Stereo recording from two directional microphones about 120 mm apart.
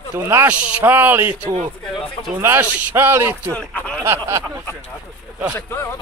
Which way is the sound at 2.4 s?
20° right (ahead or behind).